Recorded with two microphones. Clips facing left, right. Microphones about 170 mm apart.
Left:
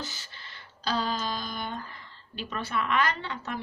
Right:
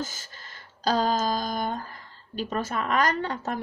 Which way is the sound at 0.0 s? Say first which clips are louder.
Right 5 dB; 45° right (ahead or behind).